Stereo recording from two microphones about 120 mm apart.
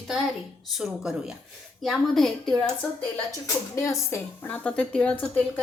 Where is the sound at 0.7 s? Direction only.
5° right (ahead or behind).